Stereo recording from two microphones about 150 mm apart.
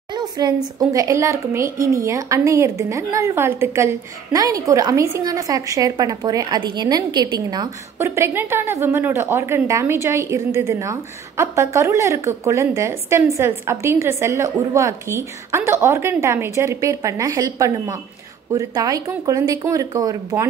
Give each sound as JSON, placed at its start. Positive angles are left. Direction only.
{"t": 0.1, "sound": "a woman's voice", "side_deg": -30}
{"t": 8.0, "sound": "a woman's voice", "side_deg": -15}